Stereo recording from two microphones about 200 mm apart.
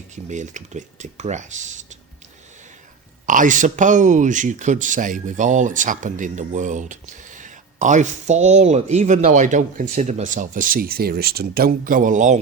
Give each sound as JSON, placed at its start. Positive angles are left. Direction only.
{"t": 0.3, "sound": "speech", "side_deg": -35}
{"t": 3.2, "sound": "speech", "side_deg": -40}